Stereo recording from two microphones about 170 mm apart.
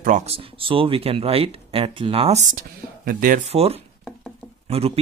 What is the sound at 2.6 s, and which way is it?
Speech, 55° right (ahead or behind).